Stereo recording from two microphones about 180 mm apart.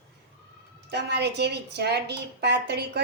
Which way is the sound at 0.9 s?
65° right (ahead or behind).